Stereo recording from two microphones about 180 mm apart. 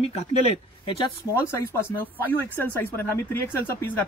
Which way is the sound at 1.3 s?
15° left (ahead or behind).